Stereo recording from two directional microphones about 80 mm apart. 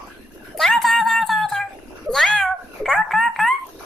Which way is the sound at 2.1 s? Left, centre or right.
Centre.